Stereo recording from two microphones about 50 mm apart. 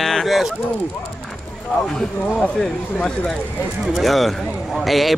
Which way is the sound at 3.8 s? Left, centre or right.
Centre.